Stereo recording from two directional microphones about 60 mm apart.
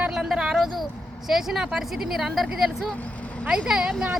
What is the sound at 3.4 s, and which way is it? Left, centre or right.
Speech, centre.